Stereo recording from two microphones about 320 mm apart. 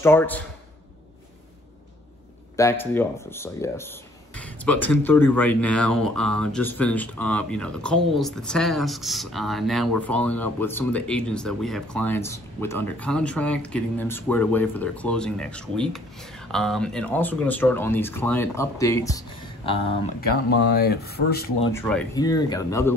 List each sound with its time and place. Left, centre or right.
0.0 s speech: centre
2.5 s speech: centre
20.2 s speech: left
21.7 s speech: centre